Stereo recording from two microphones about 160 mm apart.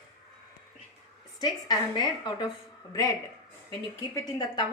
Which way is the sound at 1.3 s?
25° left (ahead or behind).